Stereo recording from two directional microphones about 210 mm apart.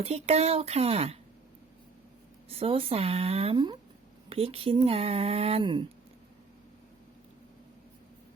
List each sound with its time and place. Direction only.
0.0 s speech: 30° right (ahead or behind)
2.5 s speech: 25° right (ahead or behind)